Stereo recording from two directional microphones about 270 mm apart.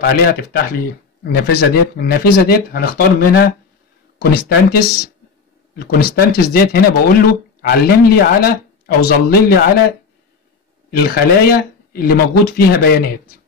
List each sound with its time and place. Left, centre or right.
0.0 s speech: left
10.9 s speech: left